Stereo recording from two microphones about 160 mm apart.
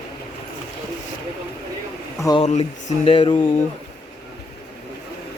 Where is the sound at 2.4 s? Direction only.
45° left (ahead or behind).